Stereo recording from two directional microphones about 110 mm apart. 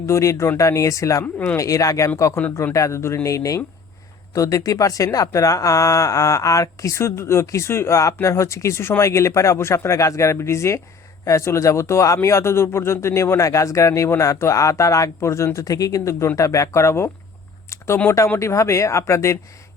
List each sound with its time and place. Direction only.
0.1 s speech: 25° left (ahead or behind)
1.2 s speech: 15° left (ahead or behind)
1.5 s speech: 30° left (ahead or behind)